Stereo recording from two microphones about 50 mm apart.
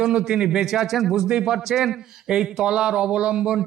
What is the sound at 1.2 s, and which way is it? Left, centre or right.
Speech, centre.